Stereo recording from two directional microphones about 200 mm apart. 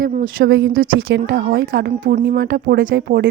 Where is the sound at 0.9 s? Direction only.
80° right.